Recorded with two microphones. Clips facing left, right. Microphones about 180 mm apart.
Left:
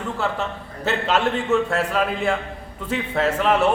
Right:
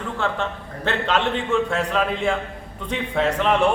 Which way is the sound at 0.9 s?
5° left (ahead or behind).